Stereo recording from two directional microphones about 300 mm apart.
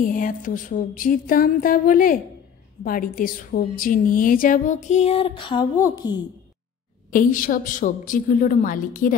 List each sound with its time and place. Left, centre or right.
0.0 s a woman's voice: left
7.1 s a woman's voice: left